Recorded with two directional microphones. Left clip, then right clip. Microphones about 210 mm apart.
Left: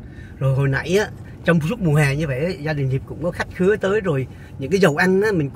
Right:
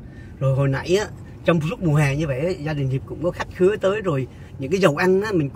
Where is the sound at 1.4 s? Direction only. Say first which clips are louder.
Left 1 dB; 20° left (ahead or behind).